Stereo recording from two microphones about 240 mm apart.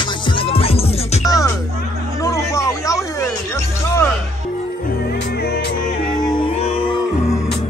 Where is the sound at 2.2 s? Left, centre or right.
Centre.